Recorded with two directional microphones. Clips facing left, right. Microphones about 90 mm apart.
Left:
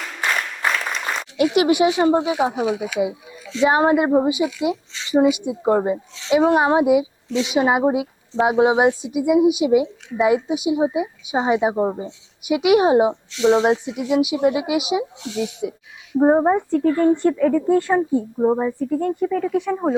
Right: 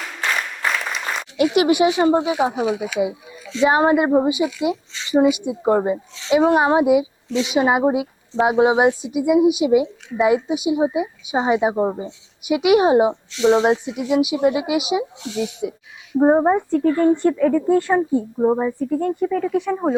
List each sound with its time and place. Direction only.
0.2 s applause: centre (ahead or behind)
1.4 s a woman's voice: 20° right (ahead or behind)
12.5 s a woman's voice: 20° right (ahead or behind)